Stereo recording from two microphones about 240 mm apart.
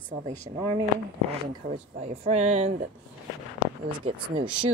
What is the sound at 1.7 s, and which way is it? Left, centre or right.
Speech, right.